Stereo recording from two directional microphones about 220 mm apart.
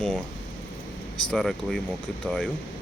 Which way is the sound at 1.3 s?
Centre (ahead or behind).